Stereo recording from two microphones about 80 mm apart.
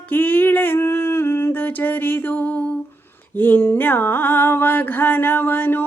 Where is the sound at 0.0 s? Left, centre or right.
Left.